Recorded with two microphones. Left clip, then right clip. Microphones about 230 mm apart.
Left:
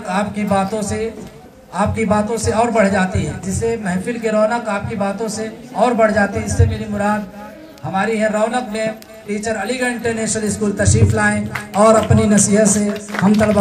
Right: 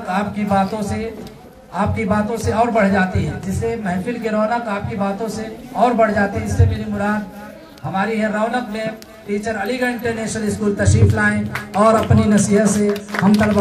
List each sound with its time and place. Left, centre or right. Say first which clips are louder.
0.0 s a man's voice: left 1 dB; left